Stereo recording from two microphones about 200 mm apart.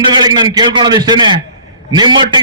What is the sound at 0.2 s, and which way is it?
A man's voice, 20° right (ahead or behind).